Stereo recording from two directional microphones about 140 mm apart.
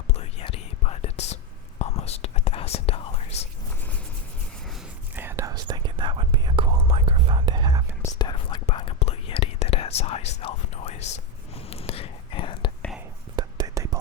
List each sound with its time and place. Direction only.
0.1 s whispering: 45° left (ahead or behind)
5.1 s whispering: 15° right (ahead or behind)
5.6 s whispering: 35° right (ahead or behind)
8.0 s whispering: 30° left (ahead or behind)
8.6 s whispering: 40° left (ahead or behind)
13.3 s whispering: 30° right (ahead or behind)